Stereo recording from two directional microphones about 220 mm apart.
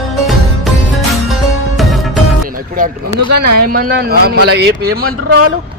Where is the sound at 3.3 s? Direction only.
40° right (ahead or behind).